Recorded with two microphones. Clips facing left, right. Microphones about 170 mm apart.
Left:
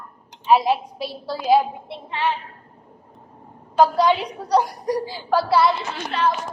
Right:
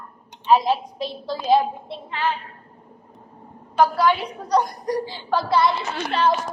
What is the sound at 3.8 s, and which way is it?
Speech, 20° left (ahead or behind).